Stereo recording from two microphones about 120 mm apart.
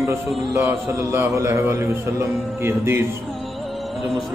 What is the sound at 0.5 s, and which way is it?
Speech, 25° right (ahead or behind).